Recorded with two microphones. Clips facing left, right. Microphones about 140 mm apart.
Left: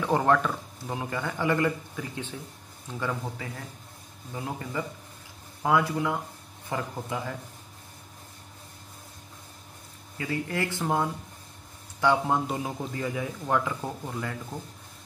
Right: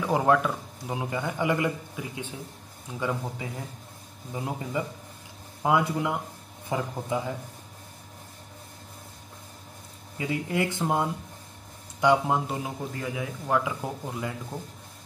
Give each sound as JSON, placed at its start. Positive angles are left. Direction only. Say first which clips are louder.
{"t": 0.0, "sound": "speech", "louder": "right 1 dB", "side_deg": -10}
{"t": 10.1, "sound": "a man's voice", "louder": "right 2 dB", "side_deg": -15}